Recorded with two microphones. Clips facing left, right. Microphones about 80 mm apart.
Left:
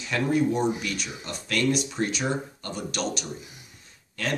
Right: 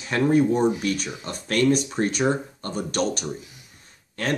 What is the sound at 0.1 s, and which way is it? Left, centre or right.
Speech, right.